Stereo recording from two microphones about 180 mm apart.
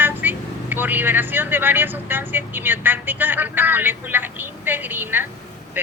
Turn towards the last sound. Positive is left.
turn(degrees=-10)  # may be behind; listen again after turning